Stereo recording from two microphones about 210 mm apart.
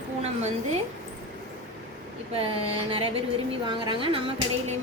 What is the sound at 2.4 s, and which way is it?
Speech, 25° right (ahead or behind).